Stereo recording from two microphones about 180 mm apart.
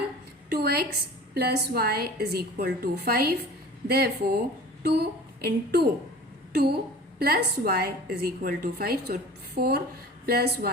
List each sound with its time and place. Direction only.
0.5 s a woman's voice: 60° right (ahead or behind)